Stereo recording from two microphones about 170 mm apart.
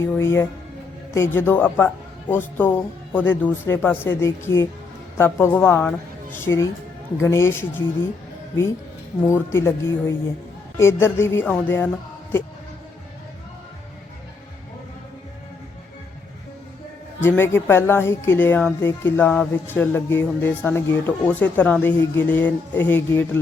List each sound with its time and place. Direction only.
0.0 s a woman's voice: 15° left (ahead or behind)
9.2 s a woman's voice: 15° left (ahead or behind)
17.2 s a woman's voice: 15° left (ahead or behind)